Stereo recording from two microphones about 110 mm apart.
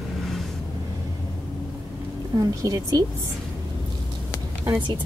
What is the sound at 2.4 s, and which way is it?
Speech, 35° right (ahead or behind).